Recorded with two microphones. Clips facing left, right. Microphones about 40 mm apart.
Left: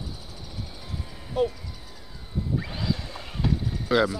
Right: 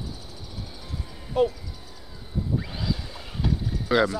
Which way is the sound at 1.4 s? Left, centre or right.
Centre.